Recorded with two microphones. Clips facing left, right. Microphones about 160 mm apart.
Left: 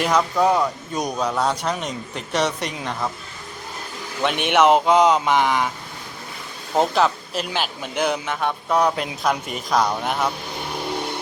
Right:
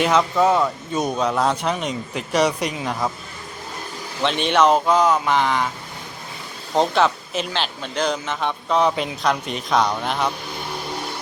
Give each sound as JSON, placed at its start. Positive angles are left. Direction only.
{"t": 0.0, "sound": "a man's voice", "side_deg": 0}
{"t": 4.2, "sound": "speech", "side_deg": 15}
{"t": 6.7, "sound": "speech", "side_deg": 0}